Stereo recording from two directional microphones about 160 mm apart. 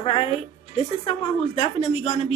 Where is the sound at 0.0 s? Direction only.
35° left (ahead or behind).